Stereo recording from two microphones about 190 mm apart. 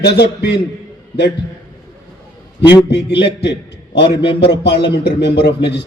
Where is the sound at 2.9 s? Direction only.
65° left (ahead or behind).